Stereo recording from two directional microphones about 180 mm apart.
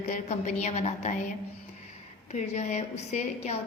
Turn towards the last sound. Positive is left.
turn(degrees=35)  # may be behind; listen again after turning